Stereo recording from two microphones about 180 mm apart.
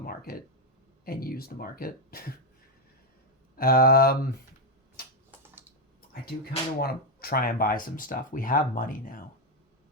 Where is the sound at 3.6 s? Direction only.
55° left (ahead or behind).